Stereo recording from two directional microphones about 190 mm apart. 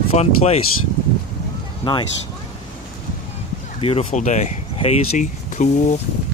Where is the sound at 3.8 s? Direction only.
35° left (ahead or behind).